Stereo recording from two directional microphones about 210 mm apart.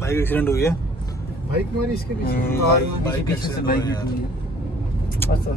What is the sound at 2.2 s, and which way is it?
Speech, 45° left (ahead or behind).